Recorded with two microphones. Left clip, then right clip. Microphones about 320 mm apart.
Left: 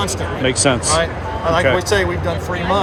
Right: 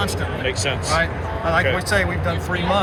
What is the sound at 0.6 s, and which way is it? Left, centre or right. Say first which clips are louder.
Speech: left 4 dB; centre.